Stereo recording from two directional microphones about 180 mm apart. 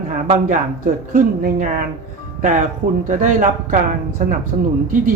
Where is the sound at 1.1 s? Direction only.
50° right (ahead or behind).